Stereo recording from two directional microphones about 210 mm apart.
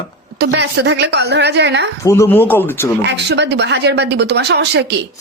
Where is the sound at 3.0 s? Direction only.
55° right (ahead or behind).